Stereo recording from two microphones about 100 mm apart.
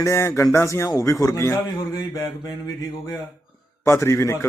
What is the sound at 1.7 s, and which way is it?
Speech, 35° left (ahead or behind).